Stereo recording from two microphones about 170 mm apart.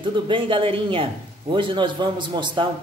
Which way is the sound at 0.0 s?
30° right (ahead or behind).